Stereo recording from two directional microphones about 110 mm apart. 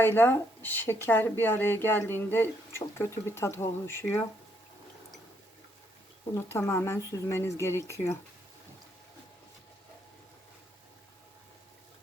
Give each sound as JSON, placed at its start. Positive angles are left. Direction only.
{"t": 0.0, "sound": "speech", "side_deg": 20}
{"t": 6.3, "sound": "speech", "side_deg": 25}